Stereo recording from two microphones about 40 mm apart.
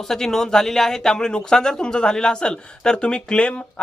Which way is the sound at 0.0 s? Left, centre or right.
Centre.